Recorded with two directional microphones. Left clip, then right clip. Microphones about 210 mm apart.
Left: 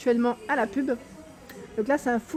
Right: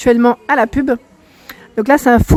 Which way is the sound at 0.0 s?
35° right (ahead or behind).